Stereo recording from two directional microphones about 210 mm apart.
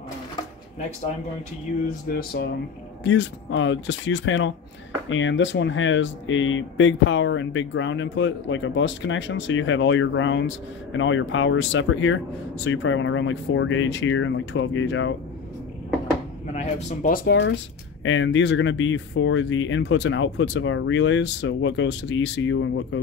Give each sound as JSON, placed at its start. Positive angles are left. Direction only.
{"t": 2.1, "sound": "speech", "side_deg": 45}
{"t": 3.0, "sound": "speech", "side_deg": 60}
{"t": 16.5, "sound": "speech", "side_deg": 40}
{"t": 18.0, "sound": "speech", "side_deg": 65}